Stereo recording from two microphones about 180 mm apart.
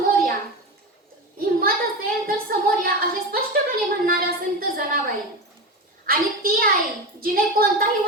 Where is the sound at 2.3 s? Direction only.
55° right (ahead or behind).